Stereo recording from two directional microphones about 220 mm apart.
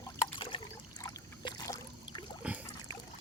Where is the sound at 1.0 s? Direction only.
15° left (ahead or behind).